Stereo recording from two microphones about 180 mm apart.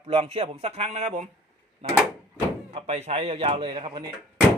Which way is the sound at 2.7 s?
35° right (ahead or behind).